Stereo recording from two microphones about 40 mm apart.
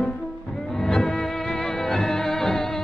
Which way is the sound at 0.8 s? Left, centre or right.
Centre.